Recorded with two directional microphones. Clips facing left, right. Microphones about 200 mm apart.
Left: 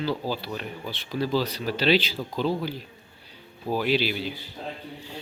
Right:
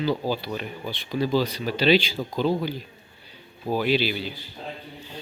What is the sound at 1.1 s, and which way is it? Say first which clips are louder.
Speech: right 2 dB; 5° left (ahead or behind).